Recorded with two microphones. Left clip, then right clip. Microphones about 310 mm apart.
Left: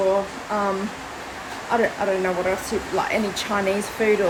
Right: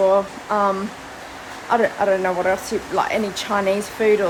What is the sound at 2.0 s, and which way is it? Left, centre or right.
Speech, centre.